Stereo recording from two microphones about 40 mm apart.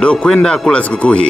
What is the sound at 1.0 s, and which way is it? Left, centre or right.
Speech, left.